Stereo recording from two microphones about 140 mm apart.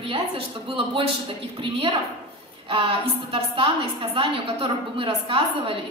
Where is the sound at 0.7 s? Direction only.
40° right (ahead or behind).